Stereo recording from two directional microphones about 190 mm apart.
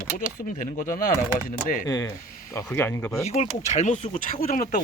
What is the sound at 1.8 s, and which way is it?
Speech, 15° left (ahead or behind).